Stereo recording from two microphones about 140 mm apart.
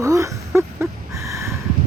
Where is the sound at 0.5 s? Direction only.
20° right (ahead or behind).